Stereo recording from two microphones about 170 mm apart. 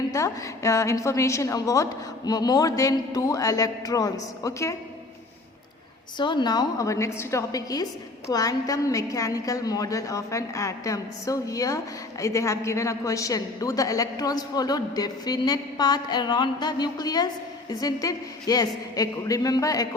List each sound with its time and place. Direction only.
0.1 s a woman's voice: 20° left (ahead or behind)
6.1 s a woman's voice: 25° left (ahead or behind)